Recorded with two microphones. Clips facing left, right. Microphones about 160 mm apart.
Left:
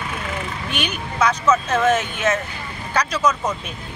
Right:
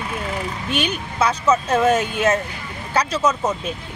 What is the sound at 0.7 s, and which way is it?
Speech, 30° right (ahead or behind).